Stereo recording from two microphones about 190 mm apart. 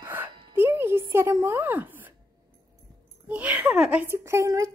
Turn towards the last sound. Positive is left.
turn(degrees=-15)  # may be behind; listen again after turning